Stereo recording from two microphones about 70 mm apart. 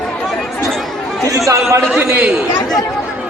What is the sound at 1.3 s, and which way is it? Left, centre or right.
Speech, right.